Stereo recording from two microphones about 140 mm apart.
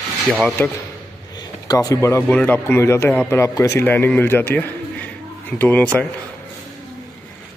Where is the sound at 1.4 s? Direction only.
25° left (ahead or behind); by 6.0 s 10° left (ahead or behind).